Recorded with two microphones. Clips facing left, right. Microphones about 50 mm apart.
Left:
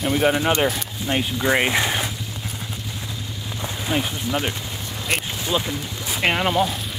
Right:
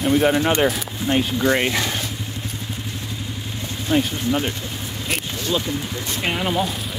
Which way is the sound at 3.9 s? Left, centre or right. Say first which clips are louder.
Right 4 dB; centre.